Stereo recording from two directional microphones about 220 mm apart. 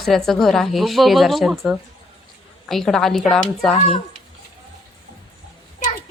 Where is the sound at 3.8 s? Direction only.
25° left (ahead or behind).